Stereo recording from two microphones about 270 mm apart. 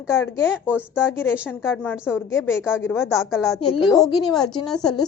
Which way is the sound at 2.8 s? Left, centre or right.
Centre.